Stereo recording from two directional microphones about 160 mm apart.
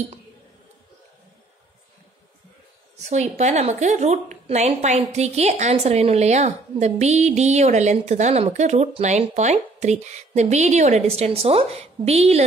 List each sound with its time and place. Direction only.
3.1 s a woman's voice: 45° right (ahead or behind)